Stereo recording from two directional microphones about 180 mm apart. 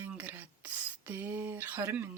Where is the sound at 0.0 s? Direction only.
10° right (ahead or behind).